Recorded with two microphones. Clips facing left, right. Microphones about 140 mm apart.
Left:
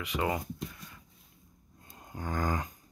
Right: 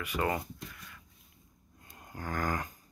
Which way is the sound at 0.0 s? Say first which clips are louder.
Even; 15° left (ahead or behind).